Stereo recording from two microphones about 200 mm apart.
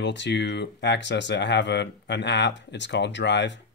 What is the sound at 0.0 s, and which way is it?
Speech, 60° left (ahead or behind).